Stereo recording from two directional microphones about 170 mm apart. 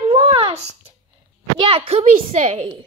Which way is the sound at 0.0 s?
35° right (ahead or behind).